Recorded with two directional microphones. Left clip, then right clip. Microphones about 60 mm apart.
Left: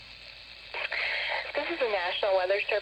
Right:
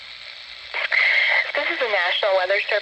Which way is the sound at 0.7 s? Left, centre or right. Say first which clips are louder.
Right 12 dB; right.